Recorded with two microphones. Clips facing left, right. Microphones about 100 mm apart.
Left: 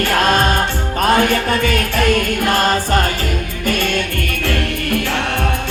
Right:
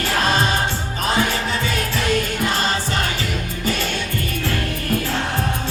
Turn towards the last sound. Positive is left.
turn(degrees=55)  # may be behind; listen again after turning